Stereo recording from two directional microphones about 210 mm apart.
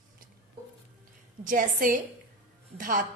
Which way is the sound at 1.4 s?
40° right (ahead or behind).